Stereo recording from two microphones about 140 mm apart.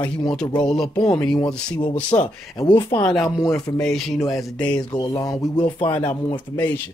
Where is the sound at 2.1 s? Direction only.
30° left (ahead or behind).